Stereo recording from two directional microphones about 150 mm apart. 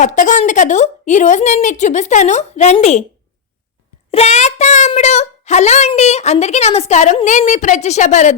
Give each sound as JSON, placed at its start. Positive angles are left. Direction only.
{"t": 0.0, "sound": "a woman's voice", "side_deg": 55}
{"t": 4.1, "sound": "child singing", "side_deg": 45}
{"t": 4.9, "sound": "a sound", "side_deg": 50}
{"t": 6.0, "sound": "a woman's voice", "side_deg": 45}